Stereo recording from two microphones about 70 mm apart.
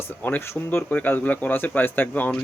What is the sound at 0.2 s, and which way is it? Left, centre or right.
Speech, left.